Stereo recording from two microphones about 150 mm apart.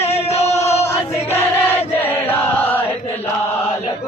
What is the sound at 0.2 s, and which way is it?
Music, 45° left (ahead or behind).